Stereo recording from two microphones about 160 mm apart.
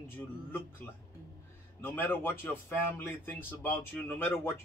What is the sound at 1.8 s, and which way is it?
Speech, 15° left (ahead or behind).